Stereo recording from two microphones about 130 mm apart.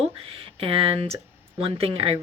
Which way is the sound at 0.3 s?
45° right (ahead or behind).